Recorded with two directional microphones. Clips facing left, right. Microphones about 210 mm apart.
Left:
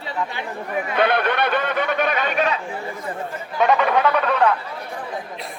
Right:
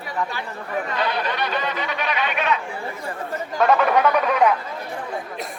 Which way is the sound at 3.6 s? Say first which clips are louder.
Even; centre (ahead or behind).